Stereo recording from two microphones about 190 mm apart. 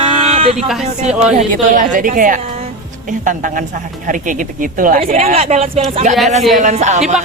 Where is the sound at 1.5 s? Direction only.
45° right (ahead or behind).